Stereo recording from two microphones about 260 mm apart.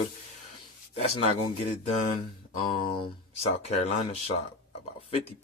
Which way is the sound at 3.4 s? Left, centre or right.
Left.